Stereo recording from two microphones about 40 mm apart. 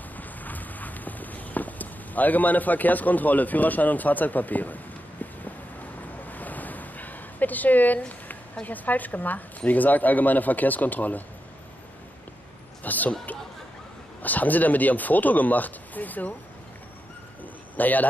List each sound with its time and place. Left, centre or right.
0.2 s walk: left
6.2 s a sound: left
8.6 s speech: left
12.8 s speech: left
14.2 s speech: left
17.7 s a man's voice: left